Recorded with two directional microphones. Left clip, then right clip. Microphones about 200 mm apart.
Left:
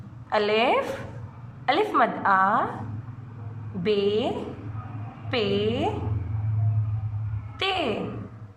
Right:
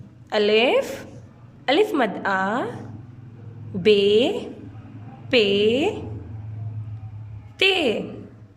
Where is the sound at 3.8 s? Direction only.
45° right (ahead or behind).